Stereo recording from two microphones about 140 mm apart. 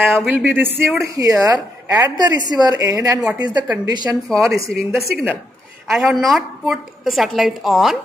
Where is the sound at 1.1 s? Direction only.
25° right (ahead or behind).